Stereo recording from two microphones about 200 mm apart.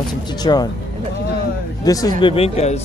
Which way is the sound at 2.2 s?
30° left (ahead or behind).